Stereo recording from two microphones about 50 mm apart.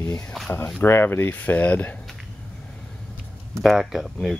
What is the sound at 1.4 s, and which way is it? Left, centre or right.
Speech, left.